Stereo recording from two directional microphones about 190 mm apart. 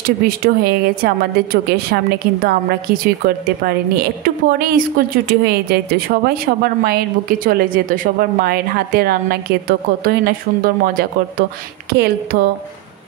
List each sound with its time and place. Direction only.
0.7 s a woman's voice: 55° right (ahead or behind)